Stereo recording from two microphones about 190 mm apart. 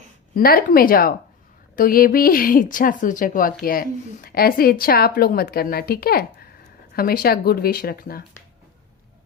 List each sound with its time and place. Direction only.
0.3 s a woman's voice: 50° left (ahead or behind)